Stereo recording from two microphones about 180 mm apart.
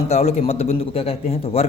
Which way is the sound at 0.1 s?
35° left (ahead or behind).